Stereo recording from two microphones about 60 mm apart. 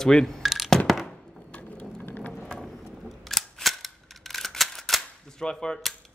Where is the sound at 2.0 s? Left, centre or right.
Left.